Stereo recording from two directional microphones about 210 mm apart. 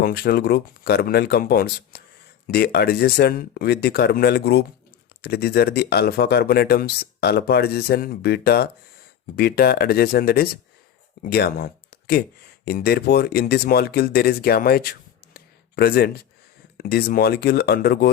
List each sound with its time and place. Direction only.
0.0 s speech: 45° left (ahead or behind)